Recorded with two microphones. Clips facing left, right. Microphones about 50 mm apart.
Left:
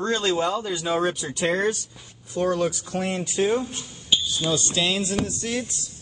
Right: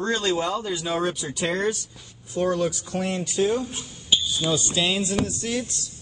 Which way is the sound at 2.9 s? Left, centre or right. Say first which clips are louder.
Even; left.